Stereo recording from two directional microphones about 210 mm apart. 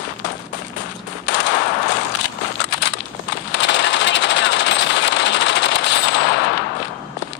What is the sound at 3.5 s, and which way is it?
Coin, 55° left (ahead or behind).